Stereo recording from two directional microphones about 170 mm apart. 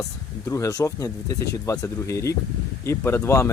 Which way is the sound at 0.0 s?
20° left (ahead or behind).